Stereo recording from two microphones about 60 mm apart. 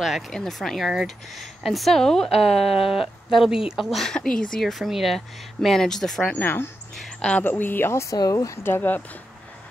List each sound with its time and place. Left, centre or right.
0.3 s a woman's voice: centre
4.0 s speech: centre
6.3 s speech: left
7.2 s speech: left
7.4 s speech: left
8.1 s speech: left
8.6 s speech: left